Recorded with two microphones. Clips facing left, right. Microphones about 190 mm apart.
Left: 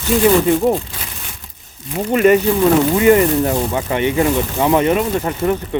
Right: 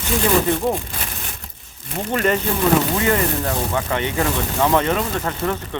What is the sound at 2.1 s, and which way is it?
Speech, 10° left (ahead or behind).